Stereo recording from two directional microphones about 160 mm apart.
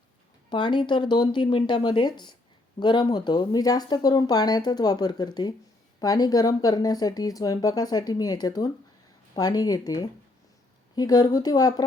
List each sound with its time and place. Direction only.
0.5 s speech: 30° left (ahead or behind)